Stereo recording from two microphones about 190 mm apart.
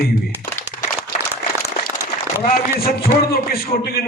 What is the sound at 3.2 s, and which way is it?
Speech, 50° left (ahead or behind).